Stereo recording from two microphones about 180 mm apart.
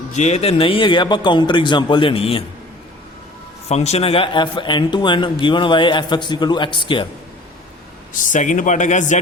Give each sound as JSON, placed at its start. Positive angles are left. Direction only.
{"t": 0.1, "sound": "speech", "side_deg": 40}
{"t": 3.7, "sound": "speech", "side_deg": 35}
{"t": 8.1, "sound": "speech", "side_deg": 45}